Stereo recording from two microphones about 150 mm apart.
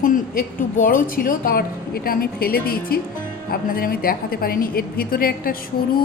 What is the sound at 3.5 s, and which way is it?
A woman's voice, 80° left.